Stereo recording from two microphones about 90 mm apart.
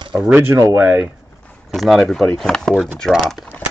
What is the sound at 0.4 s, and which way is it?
Speech, 30° right (ahead or behind).